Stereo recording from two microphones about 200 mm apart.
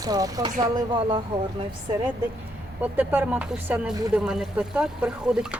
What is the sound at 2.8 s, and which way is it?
Speech, 10° right (ahead or behind).